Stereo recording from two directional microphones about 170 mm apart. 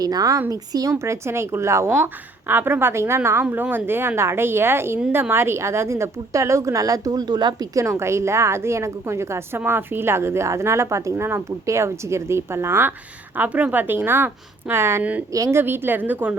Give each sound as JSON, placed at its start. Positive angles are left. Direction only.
{"t": 0.0, "sound": "a woman's voice", "side_deg": -20}